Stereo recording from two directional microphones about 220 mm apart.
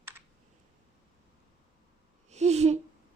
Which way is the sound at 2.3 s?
30° right (ahead or behind).